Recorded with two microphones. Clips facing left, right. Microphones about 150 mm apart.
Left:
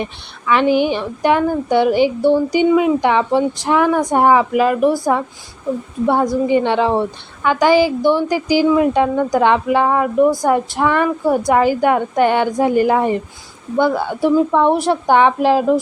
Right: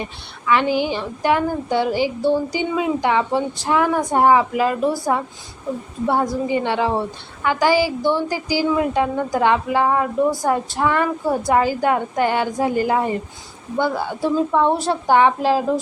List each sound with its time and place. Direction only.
0.5 s a woman's voice: 20° left (ahead or behind)
6.1 s a woman's voice: 20° left (ahead or behind)